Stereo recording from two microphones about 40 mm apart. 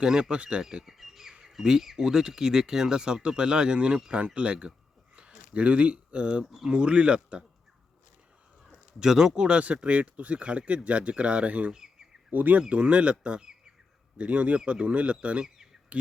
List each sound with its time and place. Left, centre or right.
0.0 s speech: centre
0.9 s speech: centre
1.3 s bird: centre
1.8 s speech: centre; by 4.7 s right
5.1 s a sound: right
6.7 s speech: right
9.0 s speech: centre; by 11.7 s right
11.7 s bird: centre
12.3 s speech: right
12.6 s speech: right